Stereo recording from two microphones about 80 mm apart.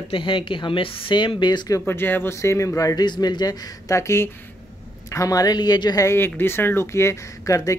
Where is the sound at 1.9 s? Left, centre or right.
Left.